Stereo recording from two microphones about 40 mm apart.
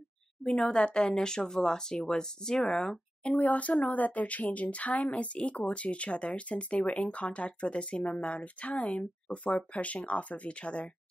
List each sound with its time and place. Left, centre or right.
0.4 s speech: left
3.3 s a woman's voice: left